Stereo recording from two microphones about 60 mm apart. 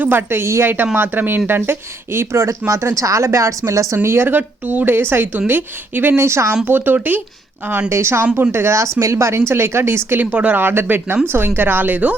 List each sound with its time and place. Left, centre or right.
0.0 s a woman's voice: right
3.9 s a woman's voice: right
6.1 s speech: right
6.7 s a woman's voice: right
7.9 s speech: right
10.3 s speech: right
10.6 s a woman's voice: right